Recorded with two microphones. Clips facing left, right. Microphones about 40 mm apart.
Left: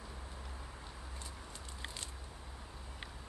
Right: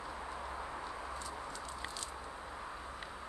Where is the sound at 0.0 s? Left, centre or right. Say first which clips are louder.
Right 8 dB; right.